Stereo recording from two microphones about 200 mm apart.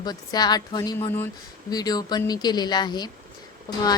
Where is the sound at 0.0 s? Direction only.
20° left (ahead or behind).